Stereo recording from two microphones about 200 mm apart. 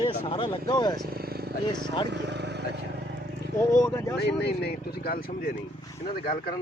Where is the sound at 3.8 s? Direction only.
15° left (ahead or behind).